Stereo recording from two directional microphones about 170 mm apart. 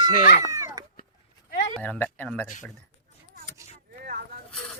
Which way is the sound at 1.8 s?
10° left (ahead or behind).